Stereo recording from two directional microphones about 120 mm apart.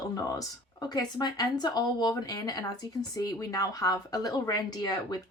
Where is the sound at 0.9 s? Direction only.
35° left (ahead or behind).